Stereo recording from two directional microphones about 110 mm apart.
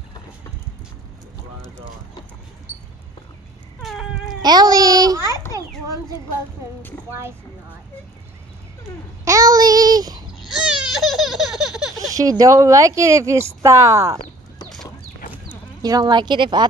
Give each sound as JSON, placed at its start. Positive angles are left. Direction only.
{"t": 3.8, "sound": "baby cry", "side_deg": -5}
{"t": 4.4, "sound": "a sound", "side_deg": -40}
{"t": 9.2, "sound": "child singing", "side_deg": -30}
{"t": 10.4, "sound": "a sound", "side_deg": 0}
{"t": 12.0, "sound": "a woman's voice", "side_deg": -30}
{"t": 15.8, "sound": "a woman's voice", "side_deg": -35}